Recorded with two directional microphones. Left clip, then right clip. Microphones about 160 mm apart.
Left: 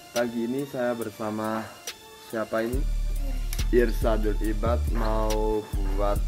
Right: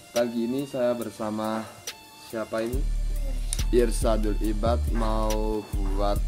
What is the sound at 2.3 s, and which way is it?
Speech, 35° left (ahead or behind).